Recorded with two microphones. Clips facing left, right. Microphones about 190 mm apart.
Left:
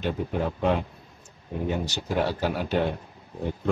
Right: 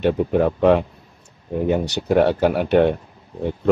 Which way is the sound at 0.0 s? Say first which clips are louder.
Right 10 dB; 60° right (ahead or behind).